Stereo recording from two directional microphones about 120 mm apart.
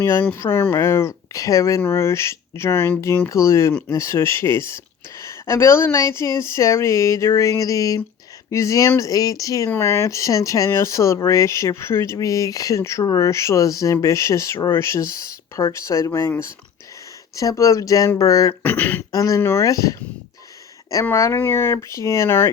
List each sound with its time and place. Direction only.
0.0 s speech: 20° left (ahead or behind)
9.6 s speech: 20° left (ahead or behind)
17.3 s speech: 30° left (ahead or behind)
18.6 s speech: 15° left (ahead or behind)
19.1 s speech: 30° left (ahead or behind)